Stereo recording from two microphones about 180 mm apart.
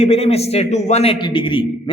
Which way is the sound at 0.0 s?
35° left (ahead or behind).